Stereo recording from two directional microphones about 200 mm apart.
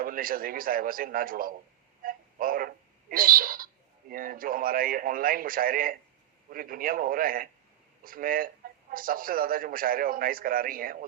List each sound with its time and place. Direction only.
0.0 s a man's voice: 45° right (ahead or behind)
2.0 s a sound: 45° right (ahead or behind)
4.1 s a man's voice: 45° right (ahead or behind)